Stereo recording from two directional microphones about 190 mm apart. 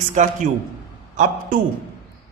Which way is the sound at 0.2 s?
40° right (ahead or behind).